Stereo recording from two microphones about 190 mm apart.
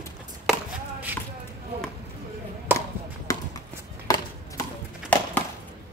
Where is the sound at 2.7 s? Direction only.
10° right (ahead or behind).